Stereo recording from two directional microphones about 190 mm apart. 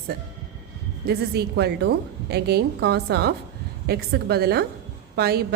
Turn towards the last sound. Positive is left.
turn(degrees=-55)  # may be behind; listen again after turning